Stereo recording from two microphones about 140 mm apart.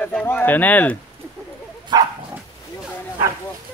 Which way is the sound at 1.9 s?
30° right (ahead or behind).